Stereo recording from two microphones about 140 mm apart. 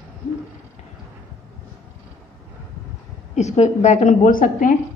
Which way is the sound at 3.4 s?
55° left (ahead or behind).